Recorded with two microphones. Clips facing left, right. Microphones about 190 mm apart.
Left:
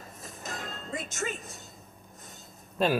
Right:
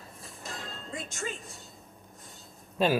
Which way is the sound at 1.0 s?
20° left (ahead or behind).